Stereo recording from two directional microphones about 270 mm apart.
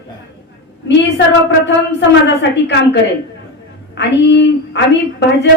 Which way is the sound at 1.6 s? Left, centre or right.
Left.